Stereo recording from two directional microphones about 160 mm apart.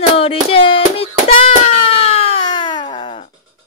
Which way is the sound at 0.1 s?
35° left (ahead or behind).